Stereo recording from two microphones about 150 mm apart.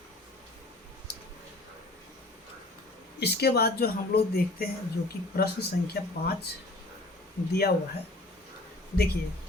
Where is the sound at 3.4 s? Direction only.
90° left.